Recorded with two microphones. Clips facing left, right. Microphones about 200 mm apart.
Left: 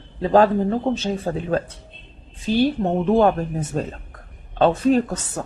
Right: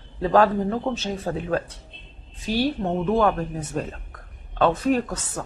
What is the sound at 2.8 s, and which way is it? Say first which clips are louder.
Speech: left 3 dB; 25° left (ahead or behind).